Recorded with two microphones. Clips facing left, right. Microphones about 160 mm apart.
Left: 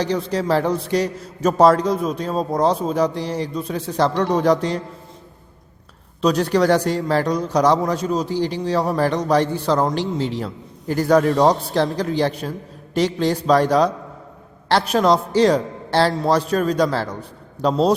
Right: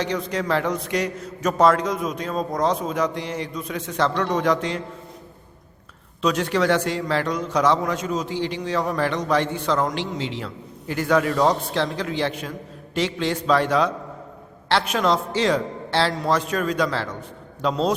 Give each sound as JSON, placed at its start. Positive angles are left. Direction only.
{"t": 0.0, "sound": "a man's voice", "side_deg": 35}
{"t": 6.2, "sound": "a man's voice", "side_deg": 35}